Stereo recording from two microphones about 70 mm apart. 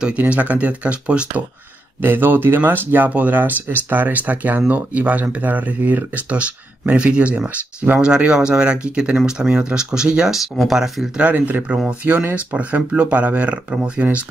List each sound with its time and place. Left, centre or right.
0.0 s speech: centre
2.0 s speech: right
8.0 s speech: centre
11.1 s speech: right